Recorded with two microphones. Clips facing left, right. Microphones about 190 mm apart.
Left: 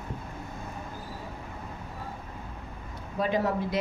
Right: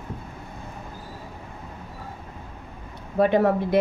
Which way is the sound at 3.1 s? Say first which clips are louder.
Right 8 dB; 60° right (ahead or behind).